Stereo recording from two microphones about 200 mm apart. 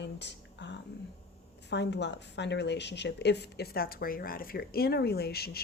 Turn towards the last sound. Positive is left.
turn(degrees=50)  # may be behind; listen again after turning